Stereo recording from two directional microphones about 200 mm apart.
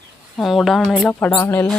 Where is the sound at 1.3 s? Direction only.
15° left (ahead or behind).